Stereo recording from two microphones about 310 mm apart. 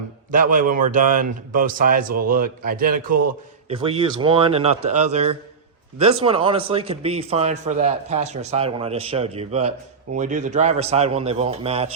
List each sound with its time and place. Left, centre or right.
0.5 s a man's voice: right
3.7 s a man's voice: centre